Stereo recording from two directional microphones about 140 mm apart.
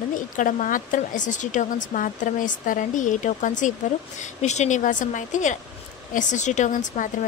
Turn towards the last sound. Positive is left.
turn(degrees=65)  # may be behind; listen again after turning